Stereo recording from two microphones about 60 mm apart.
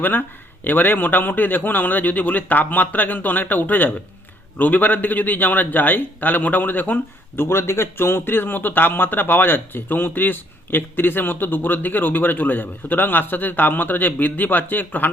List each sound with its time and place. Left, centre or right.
0.0 s a man's voice: left
7.4 s speech: left